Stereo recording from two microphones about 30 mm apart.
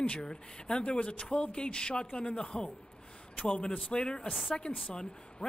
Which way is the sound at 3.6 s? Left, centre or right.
Left.